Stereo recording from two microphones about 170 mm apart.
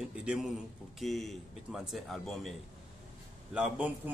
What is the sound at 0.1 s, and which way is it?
A man's voice, 5° right (ahead or behind).